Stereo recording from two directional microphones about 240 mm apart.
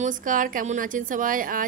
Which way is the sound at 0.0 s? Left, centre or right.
Right.